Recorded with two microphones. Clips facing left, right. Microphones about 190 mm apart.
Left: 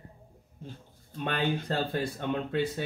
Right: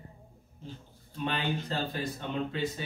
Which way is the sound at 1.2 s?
55° left (ahead or behind).